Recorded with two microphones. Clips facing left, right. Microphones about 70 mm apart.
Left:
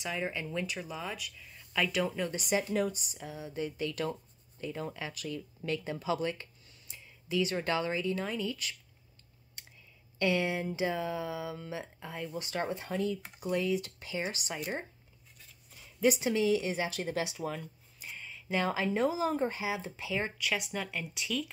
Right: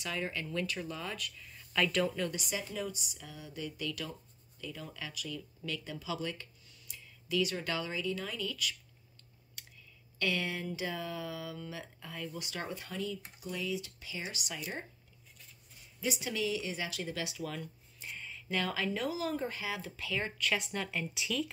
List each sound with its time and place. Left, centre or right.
0.0 s speech: centre
2.0 s speech: centre
2.7 s speech: left
3.2 s speech: left
9.6 s clicking: left
10.1 s speech: left
16.2 s speech: left
18.0 s a sound: centre
18.5 s speech: left
19.6 s speech: centre